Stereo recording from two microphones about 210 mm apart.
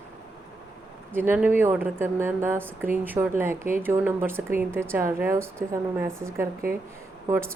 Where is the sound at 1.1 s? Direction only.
10° right (ahead or behind).